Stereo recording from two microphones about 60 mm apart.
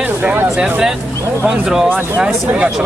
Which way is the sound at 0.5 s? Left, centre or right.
Right.